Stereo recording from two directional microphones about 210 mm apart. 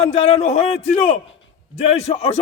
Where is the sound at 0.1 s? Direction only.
30° left (ahead or behind).